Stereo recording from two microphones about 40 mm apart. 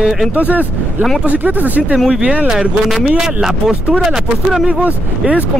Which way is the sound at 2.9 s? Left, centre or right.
Centre.